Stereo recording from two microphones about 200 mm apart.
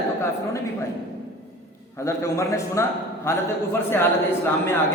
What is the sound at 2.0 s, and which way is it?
A man's voice, 15° left (ahead or behind).